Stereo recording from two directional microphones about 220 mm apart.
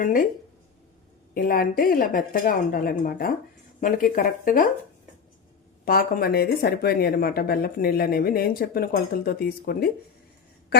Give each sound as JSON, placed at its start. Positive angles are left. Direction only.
{"t": 0.0, "sound": "a woman's voice", "side_deg": 40}
{"t": 1.3, "sound": "a woman's voice", "side_deg": 40}
{"t": 5.8, "sound": "speech", "side_deg": 40}